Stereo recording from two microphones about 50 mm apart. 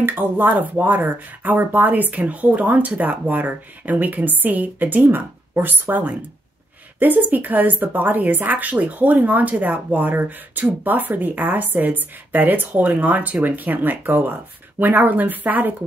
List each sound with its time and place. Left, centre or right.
0.0 s a woman's voice: right